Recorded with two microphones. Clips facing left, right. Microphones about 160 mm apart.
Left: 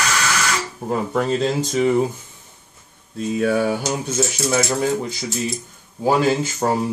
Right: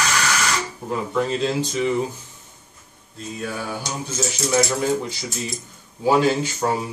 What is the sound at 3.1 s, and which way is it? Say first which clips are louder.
Speech: left 11 dB; 65° left (ahead or behind).